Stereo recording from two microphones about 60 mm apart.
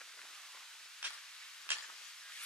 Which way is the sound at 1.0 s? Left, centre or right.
Right.